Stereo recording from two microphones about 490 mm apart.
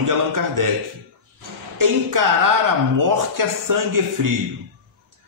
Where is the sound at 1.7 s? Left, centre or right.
Right.